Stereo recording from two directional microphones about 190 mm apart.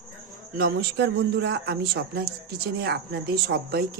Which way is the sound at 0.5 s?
55° right (ahead or behind).